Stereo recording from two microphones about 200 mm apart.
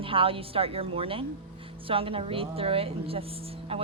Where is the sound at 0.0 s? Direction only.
25° right (ahead or behind).